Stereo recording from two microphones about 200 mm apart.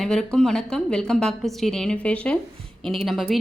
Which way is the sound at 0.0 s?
5° left (ahead or behind).